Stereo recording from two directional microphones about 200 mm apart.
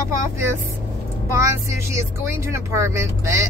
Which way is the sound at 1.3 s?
15° right (ahead or behind).